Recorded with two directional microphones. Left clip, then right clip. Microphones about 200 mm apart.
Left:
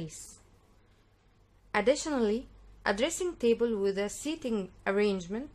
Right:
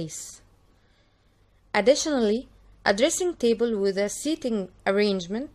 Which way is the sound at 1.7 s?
25° right (ahead or behind).